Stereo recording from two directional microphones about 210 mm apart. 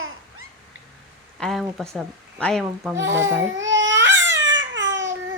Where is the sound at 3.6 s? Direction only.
60° right (ahead or behind).